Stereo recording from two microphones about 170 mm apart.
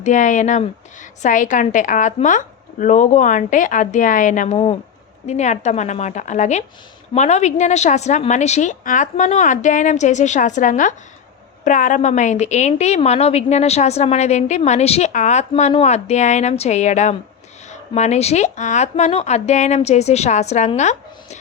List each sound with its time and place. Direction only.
0.0 s a woman's voice: 50° left (ahead or behind)
4.5 s a woman's voice: 35° left (ahead or behind)